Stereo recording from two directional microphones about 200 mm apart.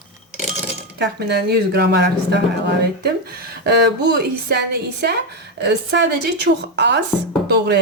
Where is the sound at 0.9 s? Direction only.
55° right (ahead or behind).